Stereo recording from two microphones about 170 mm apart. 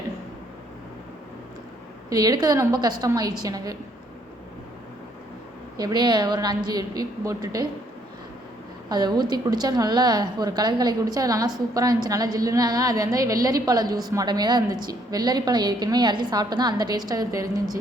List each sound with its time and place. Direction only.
2.0 s a woman's voice: 20° right (ahead or behind)
5.7 s a woman's voice: 25° right (ahead or behind)
8.9 s a woman's voice: 25° right (ahead or behind)